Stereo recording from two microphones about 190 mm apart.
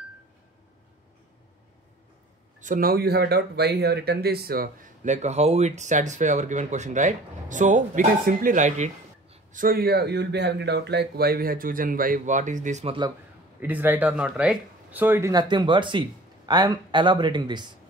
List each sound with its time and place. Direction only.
2.6 s speech: 45° right (ahead or behind)
5.0 s speech: 35° right (ahead or behind)
13.6 s speech: 10° right (ahead or behind)